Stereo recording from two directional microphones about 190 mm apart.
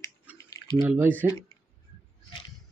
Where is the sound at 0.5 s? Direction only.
20° left (ahead or behind).